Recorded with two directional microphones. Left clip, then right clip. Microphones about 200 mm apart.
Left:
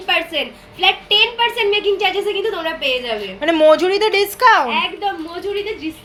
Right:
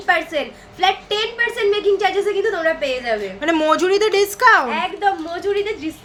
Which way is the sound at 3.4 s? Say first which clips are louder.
Left 6 dB; 5° right (ahead or behind).